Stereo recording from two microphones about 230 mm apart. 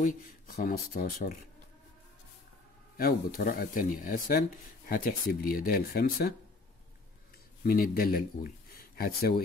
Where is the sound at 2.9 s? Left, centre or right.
Left.